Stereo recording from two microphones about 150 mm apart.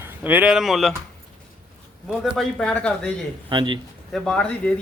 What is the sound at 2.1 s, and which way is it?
Speech, centre (ahead or behind).